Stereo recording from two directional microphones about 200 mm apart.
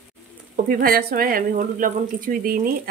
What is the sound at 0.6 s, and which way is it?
Speech, 50° right (ahead or behind).